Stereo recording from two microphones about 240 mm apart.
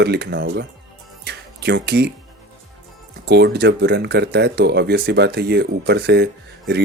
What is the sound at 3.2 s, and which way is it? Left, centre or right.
Speech, right.